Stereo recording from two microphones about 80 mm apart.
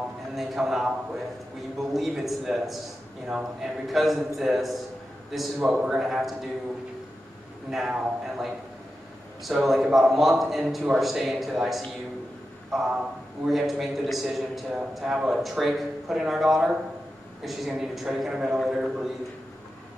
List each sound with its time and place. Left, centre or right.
0.3 s a man's voice: centre
7.7 s a man's voice: centre